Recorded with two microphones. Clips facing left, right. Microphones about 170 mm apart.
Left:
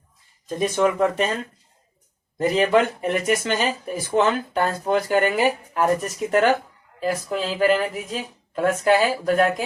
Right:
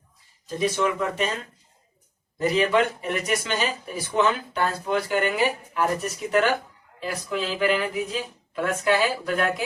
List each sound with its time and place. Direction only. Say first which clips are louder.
0.4 s speech: left 3 dB; 45° left (ahead or behind)
2.4 s speech: left 3 dB; 45° left (ahead or behind)